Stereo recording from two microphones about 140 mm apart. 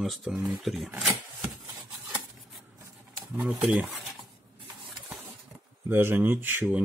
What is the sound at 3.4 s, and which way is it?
Speech, 5° right (ahead or behind).